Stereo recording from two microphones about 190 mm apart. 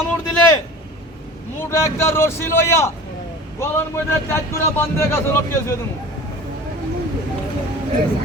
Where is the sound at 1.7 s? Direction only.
15° left (ahead or behind).